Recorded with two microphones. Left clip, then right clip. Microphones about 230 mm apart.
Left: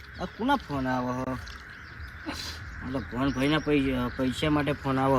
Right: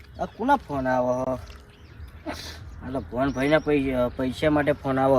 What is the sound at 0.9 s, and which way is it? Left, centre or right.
Speech, centre.